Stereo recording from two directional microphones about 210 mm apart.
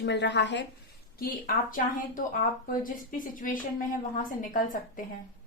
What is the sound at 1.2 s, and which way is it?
Speech, 40° left (ahead or behind).